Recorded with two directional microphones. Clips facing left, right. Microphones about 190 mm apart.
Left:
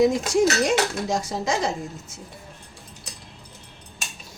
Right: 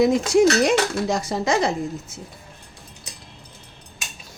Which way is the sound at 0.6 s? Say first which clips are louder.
Right 3 dB; 65° right (ahead or behind).